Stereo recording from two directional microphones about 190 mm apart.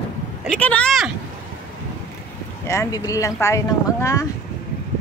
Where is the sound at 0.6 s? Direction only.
5° left (ahead or behind).